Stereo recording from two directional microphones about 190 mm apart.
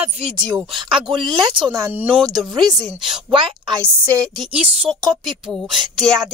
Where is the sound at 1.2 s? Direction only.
25° right (ahead or behind).